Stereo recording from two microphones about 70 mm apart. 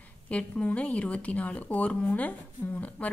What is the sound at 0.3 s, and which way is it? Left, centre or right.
Speech, centre.